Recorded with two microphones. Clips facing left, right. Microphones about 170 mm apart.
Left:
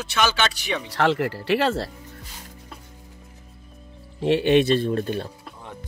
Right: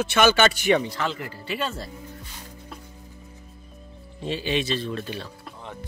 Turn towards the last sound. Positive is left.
turn(degrees=50)  # may be behind; listen again after turning